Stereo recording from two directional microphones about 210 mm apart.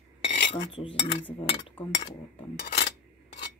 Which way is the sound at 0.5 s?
25° left (ahead or behind).